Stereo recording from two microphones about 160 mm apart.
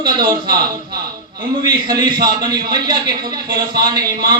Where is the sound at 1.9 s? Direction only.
25° right (ahead or behind).